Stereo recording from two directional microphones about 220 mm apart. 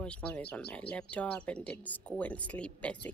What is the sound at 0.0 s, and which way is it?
A woman's voice, 5° left (ahead or behind).